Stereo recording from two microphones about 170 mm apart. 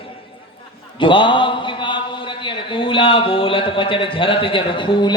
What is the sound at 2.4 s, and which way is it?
A man's voice, 30° left (ahead or behind).